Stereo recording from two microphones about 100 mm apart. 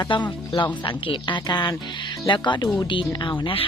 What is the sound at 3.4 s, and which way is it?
Speech, 65° left (ahead or behind).